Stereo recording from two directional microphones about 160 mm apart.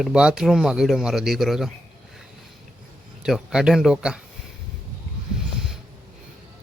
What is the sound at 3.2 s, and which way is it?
Speech, 5° right (ahead or behind).